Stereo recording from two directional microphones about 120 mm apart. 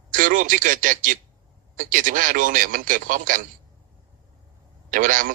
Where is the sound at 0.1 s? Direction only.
90° right.